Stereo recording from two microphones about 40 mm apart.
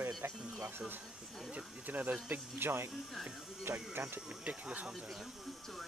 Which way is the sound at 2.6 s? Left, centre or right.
Right.